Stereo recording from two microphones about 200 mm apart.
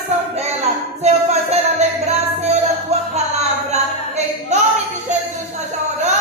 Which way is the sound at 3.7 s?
35° right (ahead or behind).